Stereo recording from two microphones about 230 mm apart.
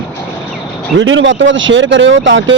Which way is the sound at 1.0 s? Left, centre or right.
Right.